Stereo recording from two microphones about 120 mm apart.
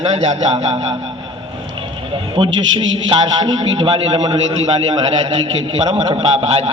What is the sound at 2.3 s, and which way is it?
A man's voice, 45° right (ahead or behind).